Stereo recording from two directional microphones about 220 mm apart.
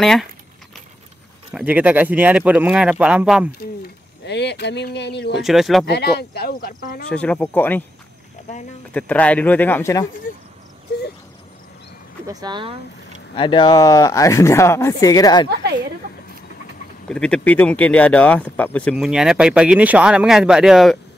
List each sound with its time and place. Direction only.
0.0 s speech: centre (ahead or behind)
1.5 s speech: 5° right (ahead or behind)
4.3 s speech: 50° left (ahead or behind)
5.4 s speech: centre (ahead or behind)
5.9 s speech: 45° left (ahead or behind)
7.1 s speech: 5° left (ahead or behind)
8.9 s speech: 5° left (ahead or behind)
12.3 s speech: 20° right (ahead or behind)
13.3 s speech: 20° left (ahead or behind)
17.1 s speech: 5° left (ahead or behind)